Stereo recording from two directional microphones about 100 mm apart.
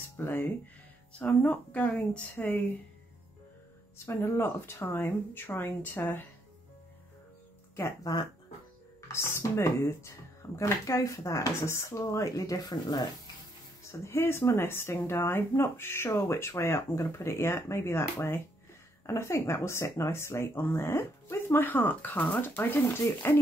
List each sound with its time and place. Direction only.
0.2 s speech: 20° left (ahead or behind)
4.0 s speech: 25° left (ahead or behind)
7.7 s speech: 30° left (ahead or behind)
13.9 s speech: 25° left (ahead or behind)